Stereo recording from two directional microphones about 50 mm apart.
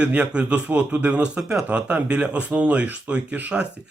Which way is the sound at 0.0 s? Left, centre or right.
Right.